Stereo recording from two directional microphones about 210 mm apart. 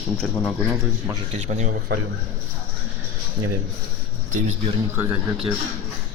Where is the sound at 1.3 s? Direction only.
30° right (ahead or behind).